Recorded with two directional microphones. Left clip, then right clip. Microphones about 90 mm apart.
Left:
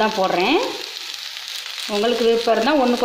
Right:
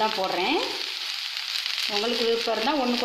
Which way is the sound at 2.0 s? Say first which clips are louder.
Left 9 dB; 25° left (ahead or behind).